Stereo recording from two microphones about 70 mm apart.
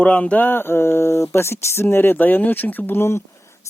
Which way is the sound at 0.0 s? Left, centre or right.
Centre.